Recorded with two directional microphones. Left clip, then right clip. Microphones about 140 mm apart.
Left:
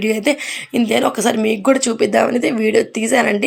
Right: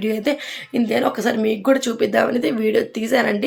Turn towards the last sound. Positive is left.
turn(degrees=20)  # may be behind; listen again after turning